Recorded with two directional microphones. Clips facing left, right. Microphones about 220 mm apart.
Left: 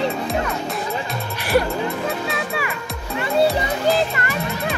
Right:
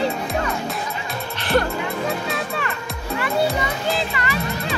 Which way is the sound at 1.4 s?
10° left (ahead or behind).